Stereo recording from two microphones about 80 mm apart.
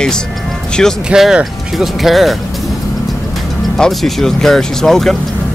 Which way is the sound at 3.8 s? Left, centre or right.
Centre.